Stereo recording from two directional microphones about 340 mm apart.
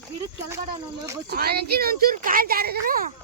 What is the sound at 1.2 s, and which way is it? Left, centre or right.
Speech, right.